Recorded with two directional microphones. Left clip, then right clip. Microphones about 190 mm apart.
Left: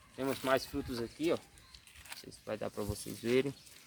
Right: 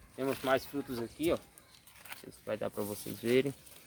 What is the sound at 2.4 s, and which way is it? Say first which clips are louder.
Speech: right 3 dB; 10° right (ahead or behind).